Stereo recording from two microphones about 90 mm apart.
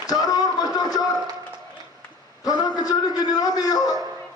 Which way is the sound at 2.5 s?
45° left (ahead or behind).